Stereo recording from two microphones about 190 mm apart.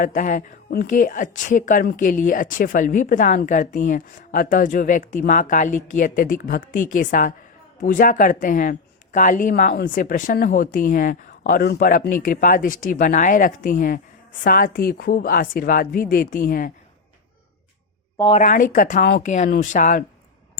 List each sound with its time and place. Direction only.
0.0 s a woman's voice: 45° left (ahead or behind)
18.3 s a woman's voice: 40° left (ahead or behind)
19.0 s a woman's voice: 55° left (ahead or behind)
19.3 s speech: 40° left (ahead or behind)